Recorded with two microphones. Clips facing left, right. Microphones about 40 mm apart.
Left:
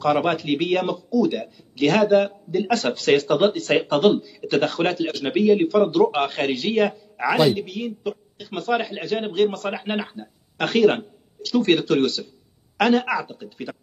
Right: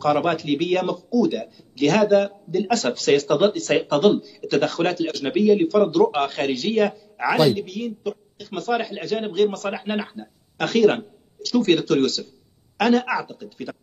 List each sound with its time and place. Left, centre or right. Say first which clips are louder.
0.0 s a man's voice: even; centre